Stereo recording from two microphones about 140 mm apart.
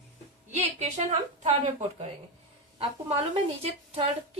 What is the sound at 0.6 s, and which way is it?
A woman's voice, 50° right (ahead or behind).